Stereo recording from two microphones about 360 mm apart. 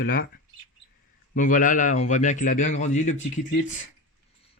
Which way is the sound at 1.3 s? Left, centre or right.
Left.